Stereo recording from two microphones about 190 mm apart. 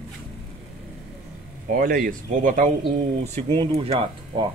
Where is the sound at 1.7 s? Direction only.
50° right (ahead or behind).